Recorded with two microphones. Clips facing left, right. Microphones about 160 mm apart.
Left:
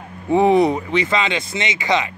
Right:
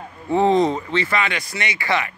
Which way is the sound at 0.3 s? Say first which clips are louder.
Left 3 dB; 15° left (ahead or behind).